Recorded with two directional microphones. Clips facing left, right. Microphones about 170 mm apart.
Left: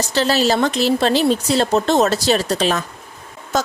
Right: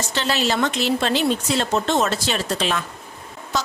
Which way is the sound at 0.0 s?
35° left (ahead or behind).